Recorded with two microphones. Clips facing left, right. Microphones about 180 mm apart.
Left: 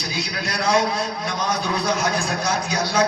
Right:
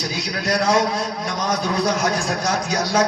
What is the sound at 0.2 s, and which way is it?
A man's voice, 40° right (ahead or behind).